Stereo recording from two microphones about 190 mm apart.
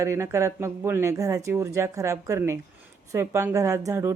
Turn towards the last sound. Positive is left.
turn(degrees=-15)  # may be behind; listen again after turning